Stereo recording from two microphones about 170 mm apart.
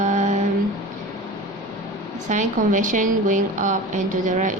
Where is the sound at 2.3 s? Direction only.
45° right (ahead or behind).